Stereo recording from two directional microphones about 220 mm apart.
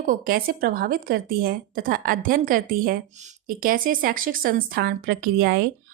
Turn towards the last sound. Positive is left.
turn(degrees=-45)  # may be behind; listen again after turning